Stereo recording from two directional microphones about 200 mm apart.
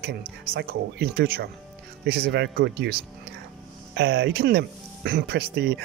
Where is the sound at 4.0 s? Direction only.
60° right (ahead or behind).